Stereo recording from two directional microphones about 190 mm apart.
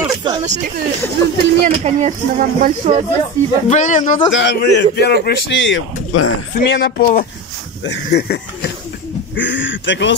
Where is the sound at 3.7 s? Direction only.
40° left (ahead or behind).